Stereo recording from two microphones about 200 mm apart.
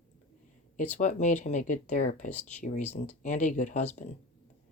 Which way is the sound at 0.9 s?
35° left (ahead or behind).